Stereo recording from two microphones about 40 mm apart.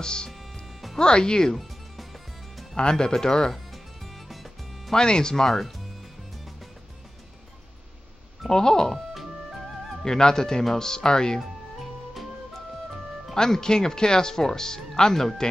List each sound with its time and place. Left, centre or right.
0.0 s speech: left
0.3 s music: centre
0.9 s speech: centre
2.7 s speech: centre
3.5 s music: centre
4.9 s speech: centre
8.5 s speech: centre
10.0 s speech: centre
13.3 s speech: centre